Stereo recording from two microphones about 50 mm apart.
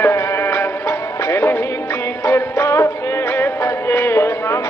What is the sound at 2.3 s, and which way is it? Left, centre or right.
Music, left.